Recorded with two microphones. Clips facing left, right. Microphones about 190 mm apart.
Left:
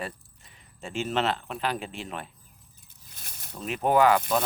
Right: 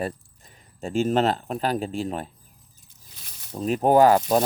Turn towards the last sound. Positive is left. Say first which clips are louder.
# right 5 dB
turn(degrees=-40)  # may be behind; listen again after turning